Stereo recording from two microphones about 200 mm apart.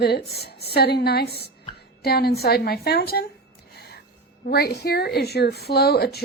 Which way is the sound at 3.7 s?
50° left (ahead or behind).